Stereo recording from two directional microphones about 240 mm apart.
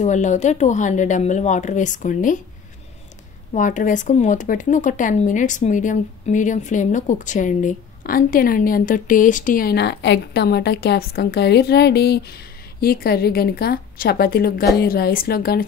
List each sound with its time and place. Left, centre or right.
0.0 s speech: left
3.5 s speech: left